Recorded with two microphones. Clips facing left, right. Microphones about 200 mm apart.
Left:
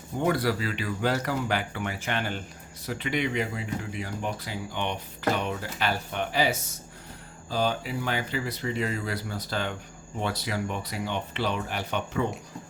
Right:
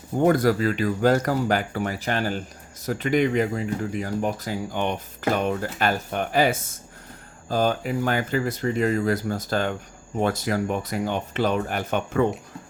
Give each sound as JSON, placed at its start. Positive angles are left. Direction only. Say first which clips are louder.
{"t": 0.2, "sound": "speech", "louder": "right 7 dB", "side_deg": -45}